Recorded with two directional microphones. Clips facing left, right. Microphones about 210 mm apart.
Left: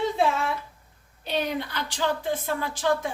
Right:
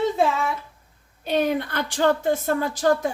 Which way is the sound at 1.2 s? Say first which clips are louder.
Right 6 dB; 50° right (ahead or behind).